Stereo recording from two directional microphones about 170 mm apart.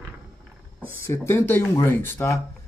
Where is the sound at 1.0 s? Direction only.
15° left (ahead or behind).